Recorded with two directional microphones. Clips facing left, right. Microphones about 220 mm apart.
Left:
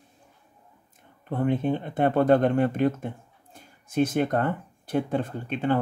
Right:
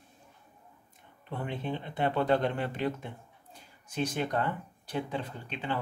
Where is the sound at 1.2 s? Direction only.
50° left (ahead or behind).